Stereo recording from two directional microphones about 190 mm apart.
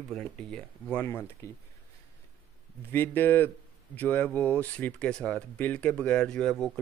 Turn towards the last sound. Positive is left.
turn(degrees=5)  # may be behind; listen again after turning